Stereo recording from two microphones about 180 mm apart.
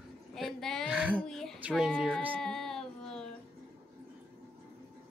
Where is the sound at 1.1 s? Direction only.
5° left (ahead or behind).